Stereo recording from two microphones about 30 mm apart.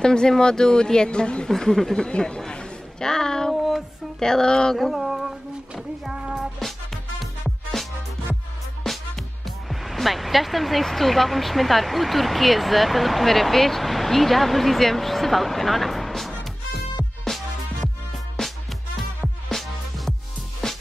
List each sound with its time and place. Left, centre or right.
0.0 s speech: left
1.6 s speech: centre
2.0 s a sound: left
4.2 s speech: centre
4.7 s a sound: centre
8.8 s music: centre
9.7 s speech: centre
18.9 s music: centre